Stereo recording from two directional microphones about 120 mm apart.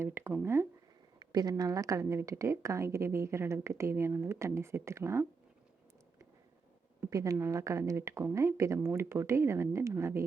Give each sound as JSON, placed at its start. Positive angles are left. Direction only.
{"t": 0.0, "sound": "speech", "side_deg": -20}
{"t": 1.2, "sound": "speech", "side_deg": -35}
{"t": 7.1, "sound": "speech", "side_deg": -30}